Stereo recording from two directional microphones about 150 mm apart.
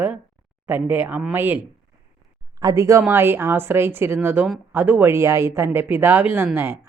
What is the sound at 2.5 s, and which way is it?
Speech, 20° right (ahead or behind).